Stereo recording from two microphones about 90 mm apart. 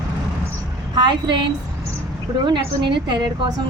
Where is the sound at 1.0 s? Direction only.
60° right (ahead or behind).